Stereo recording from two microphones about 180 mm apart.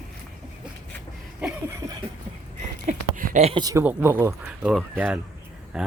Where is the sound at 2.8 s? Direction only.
50° right (ahead or behind).